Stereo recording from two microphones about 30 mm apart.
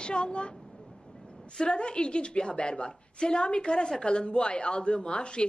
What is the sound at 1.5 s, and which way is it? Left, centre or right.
A woman's voice, left.